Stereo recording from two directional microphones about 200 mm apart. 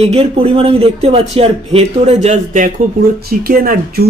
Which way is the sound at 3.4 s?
50° right (ahead or behind).